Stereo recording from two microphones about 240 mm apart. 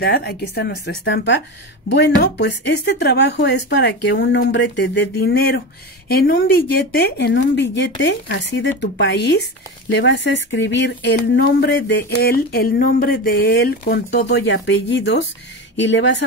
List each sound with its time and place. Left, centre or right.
0.0 s speech: left